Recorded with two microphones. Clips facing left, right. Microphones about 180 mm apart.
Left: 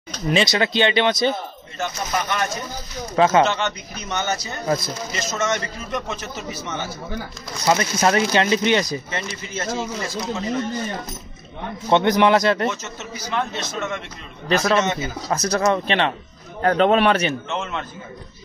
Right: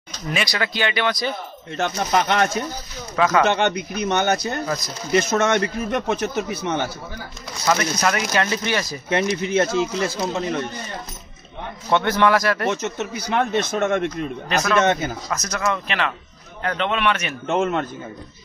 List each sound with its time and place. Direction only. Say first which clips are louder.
0.3 s speech: left 5 dB; 25° left (ahead or behind)
1.8 s a man's voice: right 4 dB; 65° right (ahead or behind)
3.2 s speech: left 3 dB; 25° left (ahead or behind)
3.4 s a man's voice: right 4 dB; 55° right (ahead or behind)
4.6 s speech: left 4 dB; 30° left (ahead or behind)
5.1 s a man's voice: right 7 dB; 60° right (ahead or behind)
7.6 s speech: left 2 dB; 25° left (ahead or behind)
9.1 s speech: right 10 dB; 65° right (ahead or behind)
11.9 s speech: left 2 dB; 20° left (ahead or behind)
12.7 s a man's voice: right 7 dB; 60° right (ahead or behind)
14.5 s speech: left 3 dB; 30° left (ahead or behind)
14.8 s a man's voice: right 3 dB; 55° right (ahead or behind)
15.2 s speech: left 7 dB; 30° left (ahead or behind)
17.5 s speech: right 7 dB; 50° right (ahead or behind)